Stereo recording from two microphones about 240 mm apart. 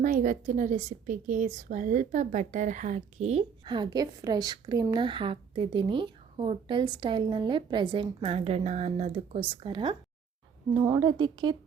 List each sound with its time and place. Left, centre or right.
0.0 s a woman's voice: right